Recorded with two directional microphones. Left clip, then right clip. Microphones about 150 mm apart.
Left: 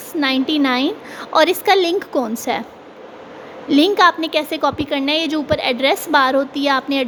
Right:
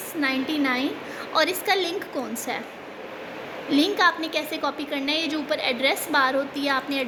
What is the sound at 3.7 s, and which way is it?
A woman's voice, 55° left (ahead or behind).